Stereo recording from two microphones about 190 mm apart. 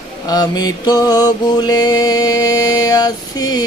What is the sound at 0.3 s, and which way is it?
Mantra, 20° left (ahead or behind).